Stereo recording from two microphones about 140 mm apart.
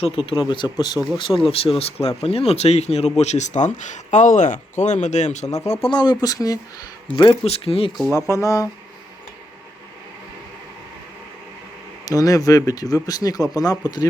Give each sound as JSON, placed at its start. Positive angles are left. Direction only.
{"t": 0.3, "sound": "speech", "side_deg": 35}
{"t": 1.4, "sound": "speech", "side_deg": 40}
{"t": 5.9, "sound": "speech", "side_deg": 30}
{"t": 7.2, "sound": "speech", "side_deg": 40}
{"t": 8.1, "sound": "speech", "side_deg": 20}
{"t": 12.0, "sound": "speech", "side_deg": 25}